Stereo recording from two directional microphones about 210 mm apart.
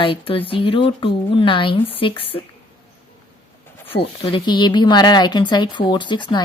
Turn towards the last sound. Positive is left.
turn(degrees=20)  # may be behind; listen again after turning